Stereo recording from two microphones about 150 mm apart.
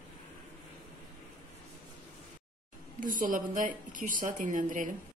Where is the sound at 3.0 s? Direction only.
65° right (ahead or behind).